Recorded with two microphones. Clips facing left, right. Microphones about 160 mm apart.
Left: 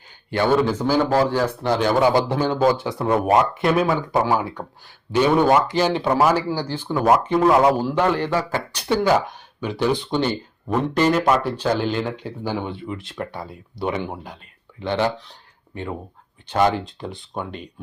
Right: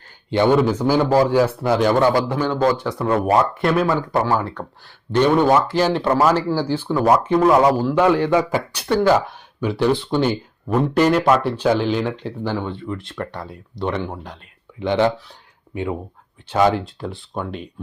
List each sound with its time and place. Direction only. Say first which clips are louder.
0.3 s a man's voice: right 3 dB; 15° right (ahead or behind)
2.1 s a man's voice: even; 25° left (ahead or behind)
3.6 s speech: right 1 dB; 5° left (ahead or behind)
6.8 s speech: even; centre (ahead or behind)
8.0 s a man's voice: right 5 dB; 10° right (ahead or behind)
8.9 s speech: right 2 dB; 5° left (ahead or behind)
14.8 s a man's voice: right 4 dB; 15° right (ahead or behind); by 17.7 s centre (ahead or behind)